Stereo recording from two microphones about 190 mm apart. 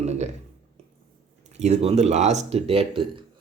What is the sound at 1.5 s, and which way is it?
Speech, 35° right (ahead or behind).